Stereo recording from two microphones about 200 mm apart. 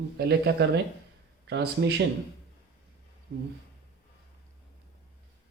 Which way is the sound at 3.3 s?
50° right (ahead or behind).